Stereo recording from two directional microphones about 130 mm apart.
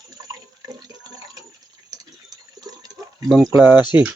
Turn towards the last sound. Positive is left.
turn(degrees=-15)  # may be behind; listen again after turning